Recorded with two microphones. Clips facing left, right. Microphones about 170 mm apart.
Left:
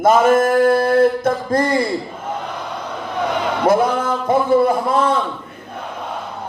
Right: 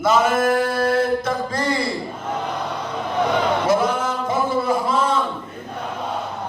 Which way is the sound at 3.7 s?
55° left (ahead or behind).